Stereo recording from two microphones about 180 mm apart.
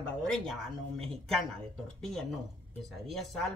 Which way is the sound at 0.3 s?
Centre (ahead or behind).